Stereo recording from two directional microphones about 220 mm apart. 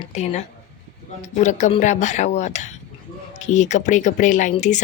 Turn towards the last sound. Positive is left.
turn(degrees=35)  # may be behind; listen again after turning